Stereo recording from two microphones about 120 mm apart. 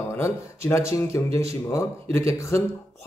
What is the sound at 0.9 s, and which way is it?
Speech, 25° left (ahead or behind).